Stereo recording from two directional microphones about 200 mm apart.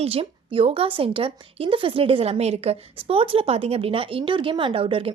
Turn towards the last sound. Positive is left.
turn(degrees=-25)  # may be behind; listen again after turning